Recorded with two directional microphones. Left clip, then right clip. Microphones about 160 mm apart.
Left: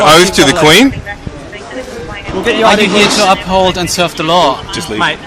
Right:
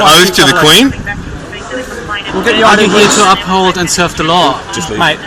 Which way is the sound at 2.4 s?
35° left (ahead or behind).